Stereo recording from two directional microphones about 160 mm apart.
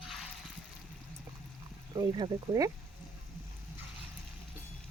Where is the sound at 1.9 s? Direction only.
25° right (ahead or behind).